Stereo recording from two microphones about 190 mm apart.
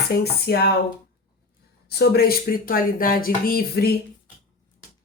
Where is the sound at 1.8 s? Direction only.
60° left (ahead or behind).